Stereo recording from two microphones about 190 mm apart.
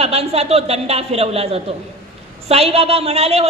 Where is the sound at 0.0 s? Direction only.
35° right (ahead or behind).